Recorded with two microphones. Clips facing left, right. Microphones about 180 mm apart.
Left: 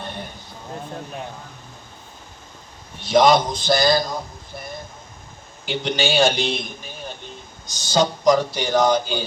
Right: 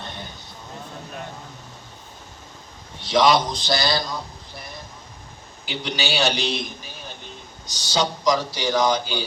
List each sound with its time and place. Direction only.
3.0 s a man's voice: 50° left (ahead or behind)
7.7 s speech: 50° left (ahead or behind)